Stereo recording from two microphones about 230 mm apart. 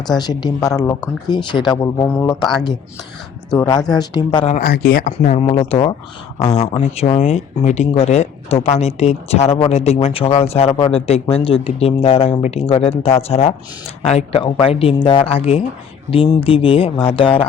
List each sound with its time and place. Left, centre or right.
0.2 s speech: centre
3.5 s speech: centre
4.5 s speech: left